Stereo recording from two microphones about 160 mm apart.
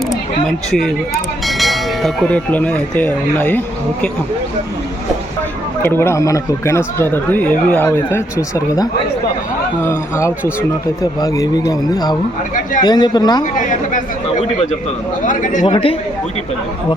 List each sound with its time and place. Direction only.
1.5 s speech: centre (ahead or behind)
5.8 s speech: 15° left (ahead or behind)
13.4 s speech: 50° left (ahead or behind)
15.2 s speech: 55° left (ahead or behind)
15.6 s speech: 35° left (ahead or behind)